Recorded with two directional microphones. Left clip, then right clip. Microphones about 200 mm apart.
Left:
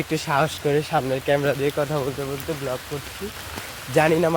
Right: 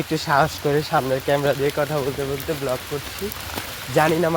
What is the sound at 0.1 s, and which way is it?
Speech, 20° left (ahead or behind).